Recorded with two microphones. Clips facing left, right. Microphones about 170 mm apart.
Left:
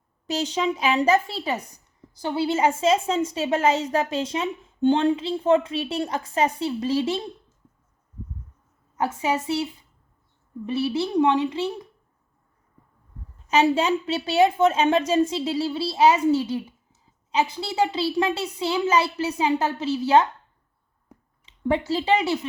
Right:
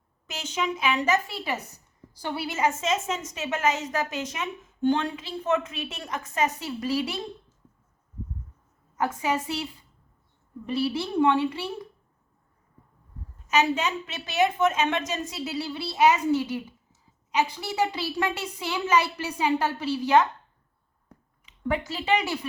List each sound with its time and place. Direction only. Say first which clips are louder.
0.3 s a woman's voice: left 6 dB; 35° left (ahead or behind)
9.0 s a woman's voice: left 2 dB; 25° left (ahead or behind)
10.7 s a woman's voice: left 3 dB; 25° left (ahead or behind)
13.5 s a woman's voice: left 5 dB; 30° left (ahead or behind)
17.6 s a woman's voice: left 4 dB; 30° left (ahead or behind)
21.4 s a woman's voice: left 5 dB; 30° left (ahead or behind)